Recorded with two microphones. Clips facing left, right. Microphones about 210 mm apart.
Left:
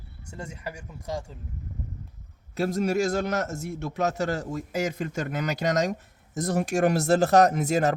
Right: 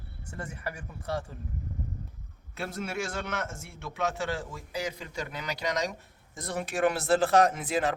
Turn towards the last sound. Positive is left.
turn(degrees=45)  # may be behind; listen again after turning